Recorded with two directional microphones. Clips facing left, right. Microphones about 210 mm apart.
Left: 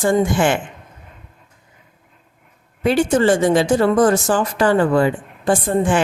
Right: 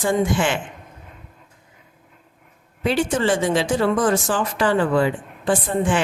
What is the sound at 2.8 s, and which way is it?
A woman's voice, 45° left (ahead or behind).